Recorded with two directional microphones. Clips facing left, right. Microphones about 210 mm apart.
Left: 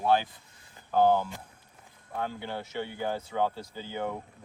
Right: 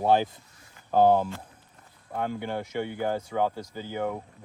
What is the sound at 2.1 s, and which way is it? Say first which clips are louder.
Speech: right 4 dB; 15° right (ahead or behind).